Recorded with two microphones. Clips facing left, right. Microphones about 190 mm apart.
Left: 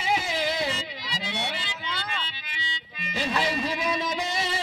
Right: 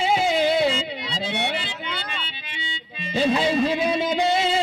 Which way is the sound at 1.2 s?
60° right (ahead or behind).